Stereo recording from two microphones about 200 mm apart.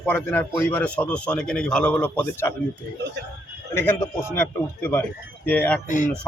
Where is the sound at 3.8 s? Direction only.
10° left (ahead or behind).